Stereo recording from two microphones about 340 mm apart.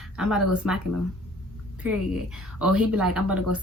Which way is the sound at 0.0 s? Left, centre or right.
Centre.